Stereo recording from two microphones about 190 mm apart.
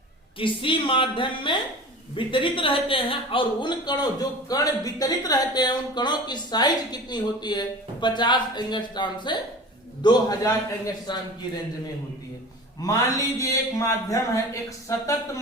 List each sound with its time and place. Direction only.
0.3 s speech: 25° left (ahead or behind)
12.8 s speech: 20° left (ahead or behind)